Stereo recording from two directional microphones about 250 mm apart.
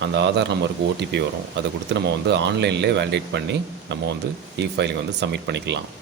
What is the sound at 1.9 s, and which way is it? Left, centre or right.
A man's voice, right.